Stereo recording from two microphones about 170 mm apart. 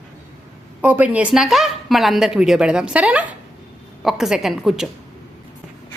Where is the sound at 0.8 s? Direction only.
10° right (ahead or behind).